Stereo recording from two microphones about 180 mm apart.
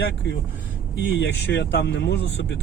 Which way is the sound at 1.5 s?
80° left.